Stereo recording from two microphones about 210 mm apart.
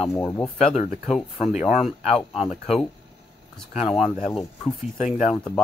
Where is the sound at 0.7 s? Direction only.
30° left (ahead or behind).